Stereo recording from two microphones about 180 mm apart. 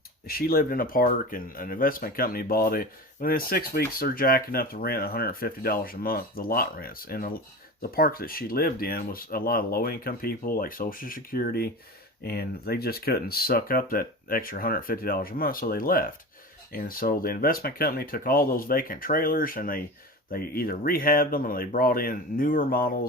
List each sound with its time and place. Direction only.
0.3 s speech: 55° left (ahead or behind)